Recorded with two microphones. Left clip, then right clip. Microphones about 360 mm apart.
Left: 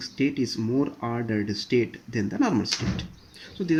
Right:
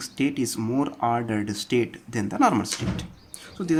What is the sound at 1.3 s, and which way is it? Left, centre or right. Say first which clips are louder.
Speech: even; right.